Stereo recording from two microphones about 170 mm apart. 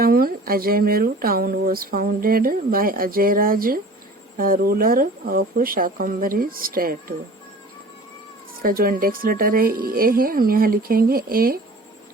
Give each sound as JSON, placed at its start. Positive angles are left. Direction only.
{"t": 0.0, "sound": "speech", "side_deg": -60}
{"t": 8.6, "sound": "speech", "side_deg": -60}